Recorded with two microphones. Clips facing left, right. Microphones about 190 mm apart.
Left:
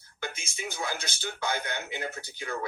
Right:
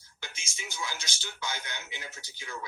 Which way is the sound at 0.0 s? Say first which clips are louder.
Left 10 dB; 55° left (ahead or behind).